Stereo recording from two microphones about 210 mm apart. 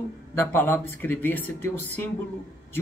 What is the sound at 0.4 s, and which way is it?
Speech, 10° left (ahead or behind).